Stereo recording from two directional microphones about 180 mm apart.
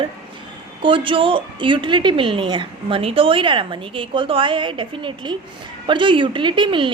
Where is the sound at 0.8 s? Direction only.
30° right (ahead or behind).